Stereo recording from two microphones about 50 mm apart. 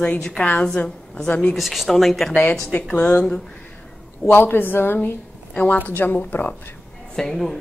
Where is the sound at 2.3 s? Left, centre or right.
Left.